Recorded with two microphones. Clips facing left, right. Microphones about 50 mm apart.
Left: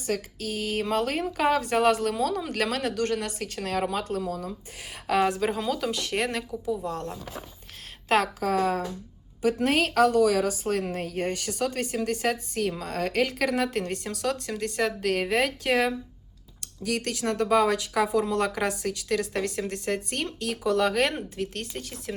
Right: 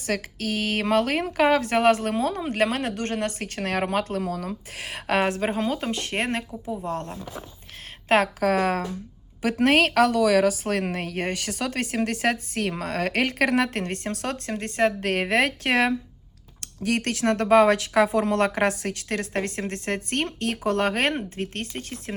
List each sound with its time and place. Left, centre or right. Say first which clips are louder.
0.0 s a woman's voice: right 2 dB; right
5.4 s a woman's voice: right 1 dB; right
8.4 s a woman's voice: right 3 dB; right